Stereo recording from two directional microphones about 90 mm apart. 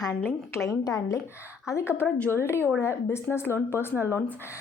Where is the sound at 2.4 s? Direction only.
30° left (ahead or behind).